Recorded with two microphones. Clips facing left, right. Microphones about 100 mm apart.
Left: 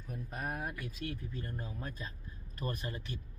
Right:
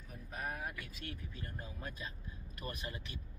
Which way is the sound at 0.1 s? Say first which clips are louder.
Left 3 dB; 50° left (ahead or behind).